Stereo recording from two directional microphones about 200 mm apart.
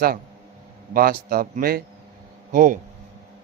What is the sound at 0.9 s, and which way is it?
Speech, 45° right (ahead or behind).